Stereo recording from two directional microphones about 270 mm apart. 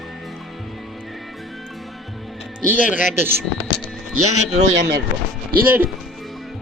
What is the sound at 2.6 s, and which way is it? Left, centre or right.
Speech, centre.